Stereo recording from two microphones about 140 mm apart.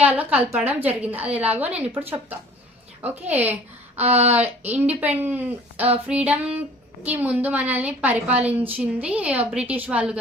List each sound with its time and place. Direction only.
0.0 s a woman's voice: 10° right (ahead or behind)
4.0 s speech: 50° right (ahead or behind)
4.4 s a woman's voice: 15° right (ahead or behind)